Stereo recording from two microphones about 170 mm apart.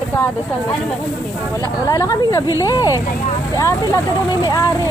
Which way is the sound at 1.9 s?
20° left (ahead or behind).